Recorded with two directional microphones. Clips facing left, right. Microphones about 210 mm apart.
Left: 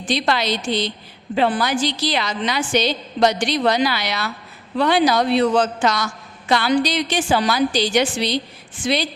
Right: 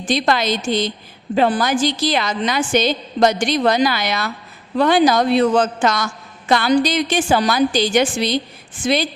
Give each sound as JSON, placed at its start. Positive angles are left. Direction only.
{"t": 0.0, "sound": "a woman's voice", "side_deg": -50}